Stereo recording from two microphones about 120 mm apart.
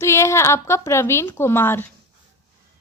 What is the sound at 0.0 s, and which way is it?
A woman's voice, 20° left (ahead or behind).